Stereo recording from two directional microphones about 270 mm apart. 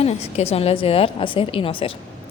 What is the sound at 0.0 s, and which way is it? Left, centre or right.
A woman's voice, left.